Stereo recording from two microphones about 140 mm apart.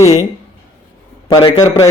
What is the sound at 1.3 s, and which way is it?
Speech, 25° left (ahead or behind).